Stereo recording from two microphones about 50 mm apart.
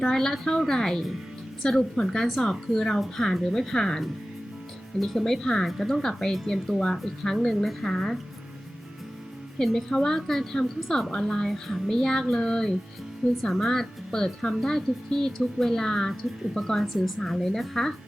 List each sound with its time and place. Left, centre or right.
0.0 s speech: centre
9.6 s speech: centre